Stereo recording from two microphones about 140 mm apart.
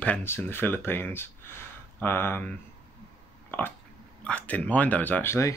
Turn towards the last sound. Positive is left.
turn(degrees=20)  # may be behind; listen again after turning